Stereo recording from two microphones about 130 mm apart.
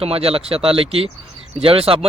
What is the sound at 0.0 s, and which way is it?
Speech, 50° right (ahead or behind).